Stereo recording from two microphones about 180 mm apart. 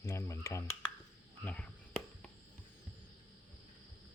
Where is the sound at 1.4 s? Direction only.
5° left (ahead or behind).